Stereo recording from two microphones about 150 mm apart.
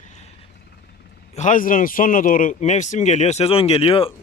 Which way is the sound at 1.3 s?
60° left (ahead or behind).